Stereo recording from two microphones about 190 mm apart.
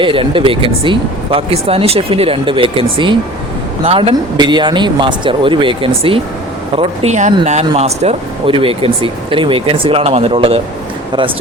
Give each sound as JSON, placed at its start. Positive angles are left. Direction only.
{"t": 0.0, "sound": "speech", "side_deg": -25}
{"t": 3.8, "sound": "speech", "side_deg": -30}